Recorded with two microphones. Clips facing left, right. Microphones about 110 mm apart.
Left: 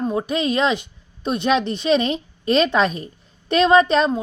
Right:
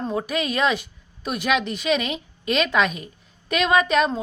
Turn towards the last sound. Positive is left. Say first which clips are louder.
# left 4 dB
turn(degrees=30)  # may be behind; listen again after turning